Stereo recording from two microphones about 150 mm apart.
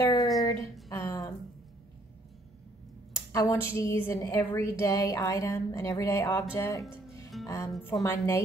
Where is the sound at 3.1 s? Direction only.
20° left (ahead or behind).